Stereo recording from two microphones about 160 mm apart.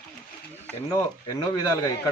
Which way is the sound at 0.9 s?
20° left (ahead or behind).